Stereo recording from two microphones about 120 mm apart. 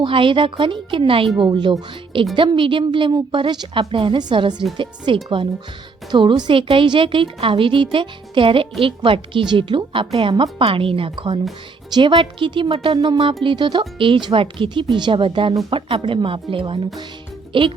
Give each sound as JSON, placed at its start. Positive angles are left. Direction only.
{"t": 0.0, "sound": "speech", "side_deg": -45}